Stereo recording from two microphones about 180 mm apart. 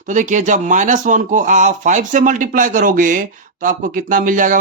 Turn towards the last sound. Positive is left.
turn(degrees=-45)  # may be behind; listen again after turning